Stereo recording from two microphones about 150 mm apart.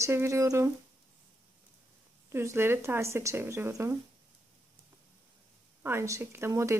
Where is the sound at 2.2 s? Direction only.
15° right (ahead or behind).